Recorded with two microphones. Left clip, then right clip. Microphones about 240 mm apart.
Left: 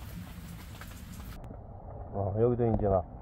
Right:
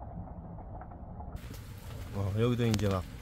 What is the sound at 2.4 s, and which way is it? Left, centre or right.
Speech, centre.